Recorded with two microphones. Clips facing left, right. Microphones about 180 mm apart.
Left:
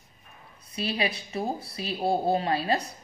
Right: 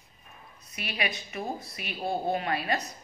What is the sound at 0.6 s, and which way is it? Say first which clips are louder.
A woman's voice: left 5 dB; 30° left (ahead or behind).